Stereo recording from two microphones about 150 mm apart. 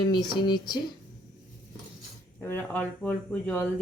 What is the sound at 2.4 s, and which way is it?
Speech, 15° left (ahead or behind).